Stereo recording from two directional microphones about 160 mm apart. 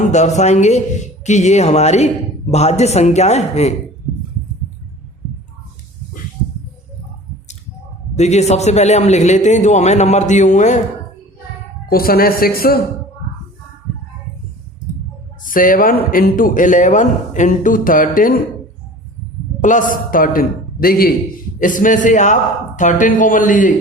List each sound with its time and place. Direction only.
0.0 s a man's voice: 45° left (ahead or behind)
8.1 s a man's voice: 45° left (ahead or behind)
11.9 s a woman's voice: 65° left (ahead or behind)
15.4 s a man's voice: 55° left (ahead or behind)
19.6 s a man's voice: 55° left (ahead or behind)